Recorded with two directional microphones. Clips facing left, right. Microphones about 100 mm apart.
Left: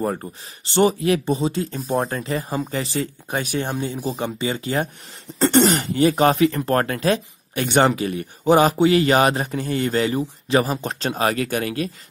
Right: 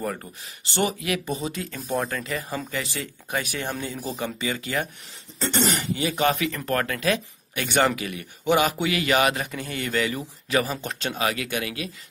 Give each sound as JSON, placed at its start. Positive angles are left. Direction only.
{"t": 0.0, "sound": "speech", "side_deg": 30}
{"t": 5.4, "sound": "speech", "side_deg": 45}